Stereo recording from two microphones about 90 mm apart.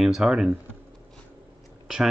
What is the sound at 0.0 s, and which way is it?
Speech, 5° right (ahead or behind).